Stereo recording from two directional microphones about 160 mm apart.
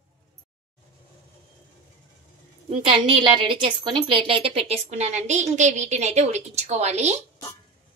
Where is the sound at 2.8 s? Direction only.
35° right (ahead or behind).